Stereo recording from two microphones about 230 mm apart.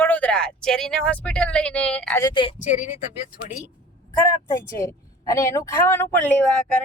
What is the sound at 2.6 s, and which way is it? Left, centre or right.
Speech, left.